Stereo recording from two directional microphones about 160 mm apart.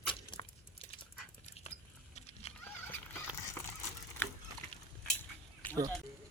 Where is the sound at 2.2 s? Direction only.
40° left (ahead or behind).